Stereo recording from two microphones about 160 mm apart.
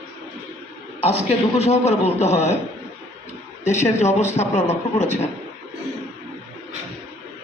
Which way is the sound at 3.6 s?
45° left (ahead or behind).